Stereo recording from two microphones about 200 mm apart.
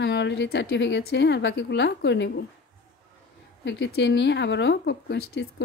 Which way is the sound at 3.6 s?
60° left (ahead or behind).